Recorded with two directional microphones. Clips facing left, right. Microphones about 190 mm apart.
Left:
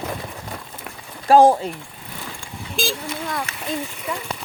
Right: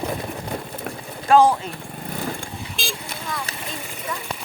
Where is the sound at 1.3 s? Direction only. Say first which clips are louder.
Left 3 dB; 45° left (ahead or behind).